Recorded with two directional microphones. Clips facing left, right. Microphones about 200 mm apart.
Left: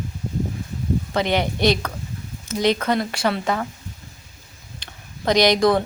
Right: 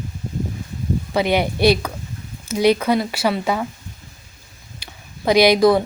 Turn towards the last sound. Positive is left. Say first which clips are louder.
# right 3 dB
turn(degrees=-5)  # may be behind; listen again after turning